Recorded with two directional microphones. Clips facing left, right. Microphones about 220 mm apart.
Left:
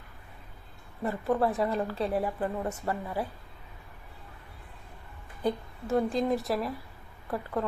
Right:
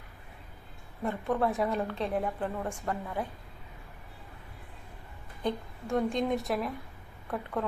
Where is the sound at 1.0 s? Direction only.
5° left (ahead or behind).